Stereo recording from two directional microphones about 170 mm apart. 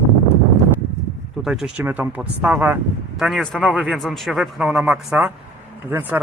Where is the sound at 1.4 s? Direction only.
5° right (ahead or behind).